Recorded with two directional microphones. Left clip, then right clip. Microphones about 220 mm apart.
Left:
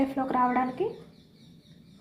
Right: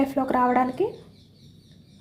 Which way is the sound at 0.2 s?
50° right (ahead or behind).